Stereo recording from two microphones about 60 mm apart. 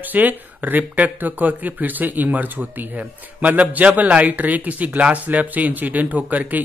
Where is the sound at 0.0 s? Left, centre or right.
Right.